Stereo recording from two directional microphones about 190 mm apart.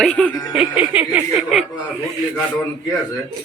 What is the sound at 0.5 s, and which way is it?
Snicker, 5° right (ahead or behind).